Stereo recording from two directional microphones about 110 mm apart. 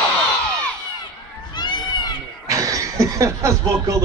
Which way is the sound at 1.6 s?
40° left (ahead or behind).